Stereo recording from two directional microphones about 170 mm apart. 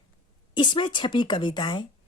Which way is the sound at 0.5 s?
30° left (ahead or behind).